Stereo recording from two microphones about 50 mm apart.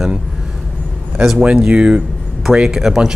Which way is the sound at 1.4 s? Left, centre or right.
Right.